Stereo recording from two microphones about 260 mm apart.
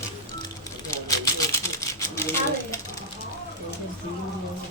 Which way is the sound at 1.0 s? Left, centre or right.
Centre.